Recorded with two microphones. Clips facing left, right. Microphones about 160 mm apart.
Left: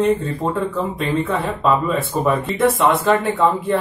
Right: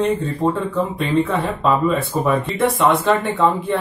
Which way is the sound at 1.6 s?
Centre (ahead or behind).